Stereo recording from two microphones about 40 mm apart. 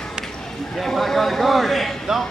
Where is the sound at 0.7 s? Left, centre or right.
Centre.